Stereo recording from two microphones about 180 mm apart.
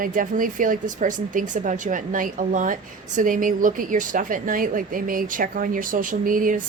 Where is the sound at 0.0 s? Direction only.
50° right (ahead or behind).